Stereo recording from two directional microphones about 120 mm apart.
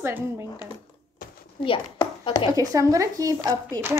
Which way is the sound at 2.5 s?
25° right (ahead or behind).